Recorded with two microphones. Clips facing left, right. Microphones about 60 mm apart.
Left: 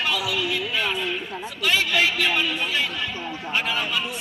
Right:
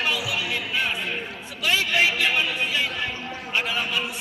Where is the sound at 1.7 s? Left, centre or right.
Right.